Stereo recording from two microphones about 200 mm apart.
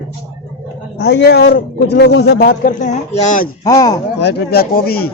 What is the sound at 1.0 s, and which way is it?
A man's voice, 55° left (ahead or behind).